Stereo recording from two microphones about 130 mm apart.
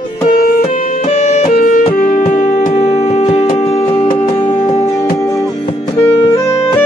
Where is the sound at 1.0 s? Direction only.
55° left (ahead or behind).